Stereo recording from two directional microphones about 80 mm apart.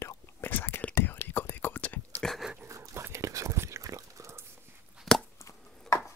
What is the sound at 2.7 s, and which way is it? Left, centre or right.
Whispering, right.